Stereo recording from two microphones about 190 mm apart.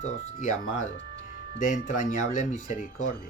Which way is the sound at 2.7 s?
45° left (ahead or behind).